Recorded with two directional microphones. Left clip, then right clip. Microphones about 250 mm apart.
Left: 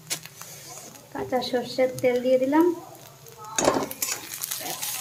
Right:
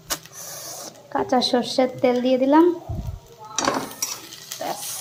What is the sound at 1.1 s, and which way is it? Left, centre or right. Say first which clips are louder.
Speech: right 6 dB; centre.